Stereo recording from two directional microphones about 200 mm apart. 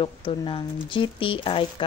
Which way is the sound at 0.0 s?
25° left (ahead or behind).